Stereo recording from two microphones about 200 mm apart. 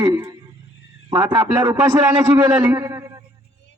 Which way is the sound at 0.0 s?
15° right (ahead or behind).